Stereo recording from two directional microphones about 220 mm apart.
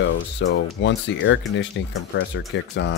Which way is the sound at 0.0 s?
55° left (ahead or behind).